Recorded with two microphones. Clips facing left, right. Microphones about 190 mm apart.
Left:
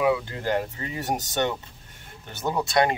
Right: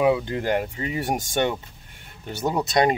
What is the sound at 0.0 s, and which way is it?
Speech, 20° right (ahead or behind).